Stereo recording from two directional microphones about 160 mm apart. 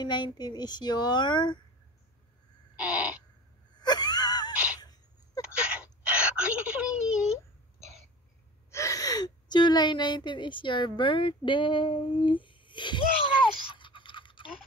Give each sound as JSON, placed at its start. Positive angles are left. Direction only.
{"t": 0.0, "sound": "a woman's voice", "side_deg": 30}
{"t": 2.7, "sound": "crow", "side_deg": -10}
{"t": 3.7, "sound": "wheeze", "side_deg": 25}
{"t": 4.7, "sound": "sneeze", "side_deg": 25}
{"t": 5.4, "sound": "whimper", "side_deg": -5}
{"t": 8.6, "sound": "a woman's voice", "side_deg": 20}
{"t": 13.7, "sound": "toothbrush", "side_deg": 30}